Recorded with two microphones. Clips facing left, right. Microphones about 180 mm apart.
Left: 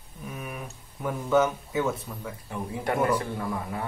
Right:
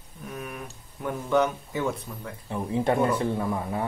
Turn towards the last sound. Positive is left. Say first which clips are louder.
# right 3 dB
turn(degrees=-25)  # may be behind; listen again after turning